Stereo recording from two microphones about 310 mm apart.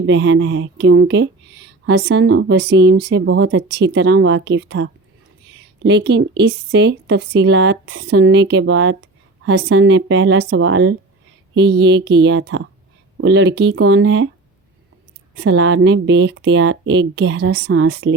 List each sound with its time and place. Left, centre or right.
0.0 s a woman's voice: right
15.4 s a woman's voice: right